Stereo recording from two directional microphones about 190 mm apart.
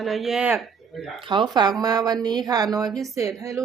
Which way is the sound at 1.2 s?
25° right (ahead or behind).